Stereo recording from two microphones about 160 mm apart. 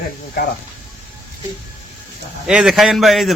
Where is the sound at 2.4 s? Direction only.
5° right (ahead or behind).